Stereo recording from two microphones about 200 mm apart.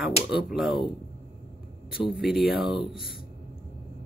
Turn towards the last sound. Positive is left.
turn(degrees=0)  # may be behind; listen again after turning